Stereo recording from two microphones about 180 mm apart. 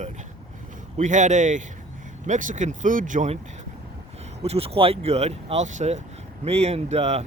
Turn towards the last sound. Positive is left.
turn(degrees=-35)  # may be behind; listen again after turning